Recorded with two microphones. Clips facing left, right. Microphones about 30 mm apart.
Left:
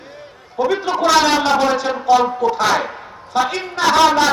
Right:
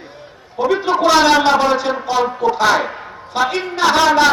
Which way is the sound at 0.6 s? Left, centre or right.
Centre.